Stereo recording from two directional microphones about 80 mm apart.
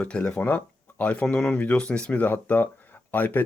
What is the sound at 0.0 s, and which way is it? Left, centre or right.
Speech, centre.